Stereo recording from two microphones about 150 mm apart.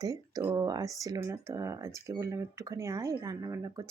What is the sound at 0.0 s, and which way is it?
Speech, 25° right (ahead or behind).